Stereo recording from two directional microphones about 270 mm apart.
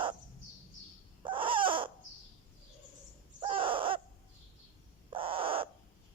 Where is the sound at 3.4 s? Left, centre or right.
Centre.